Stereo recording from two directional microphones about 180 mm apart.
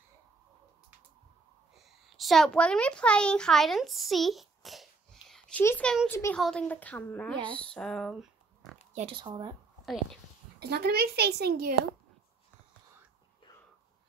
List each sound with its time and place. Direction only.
1.8 s a woman's voice: centre (ahead or behind)
5.6 s speech: 10° left (ahead or behind)
6.3 s speech: 5° left (ahead or behind)
8.9 s speech: 30° right (ahead or behind)
10.6 s a woman's voice: 65° right (ahead or behind)